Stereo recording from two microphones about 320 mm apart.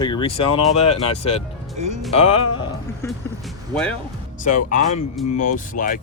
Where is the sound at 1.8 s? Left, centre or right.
Right.